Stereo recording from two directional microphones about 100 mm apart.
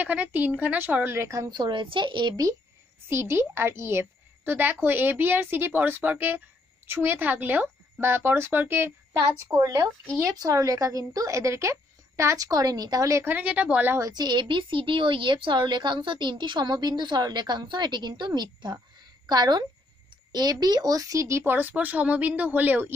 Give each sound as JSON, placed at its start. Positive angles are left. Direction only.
{"t": 0.0, "sound": "a woman's voice", "side_deg": -15}
{"t": 1.5, "sound": "speech", "side_deg": -50}
{"t": 3.1, "sound": "a woman's voice", "side_deg": -25}
{"t": 9.5, "sound": "a woman's voice", "side_deg": -35}
{"t": 13.3, "sound": "a woman's voice", "side_deg": -15}
{"t": 13.9, "sound": "a woman's voice", "side_deg": -40}